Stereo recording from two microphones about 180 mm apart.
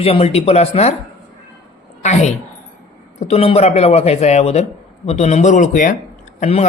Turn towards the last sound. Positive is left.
turn(degrees=40)  # may be behind; listen again after turning